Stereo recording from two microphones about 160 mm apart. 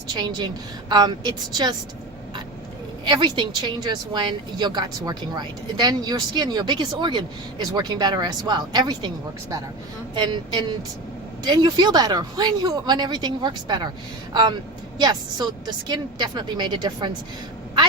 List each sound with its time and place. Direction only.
0.2 s a woman's voice: 30° right (ahead or behind)
3.0 s a woman's voice: 30° right (ahead or behind)
10.2 s a woman's voice: 30° right (ahead or behind)
14.9 s a woman's voice: 25° right (ahead or behind)